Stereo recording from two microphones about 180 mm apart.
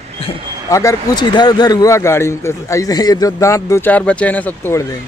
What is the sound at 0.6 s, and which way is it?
Speech, 20° left (ahead or behind).